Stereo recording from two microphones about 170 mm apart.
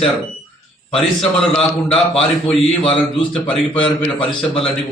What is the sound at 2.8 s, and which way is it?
Speech, 30° left (ahead or behind).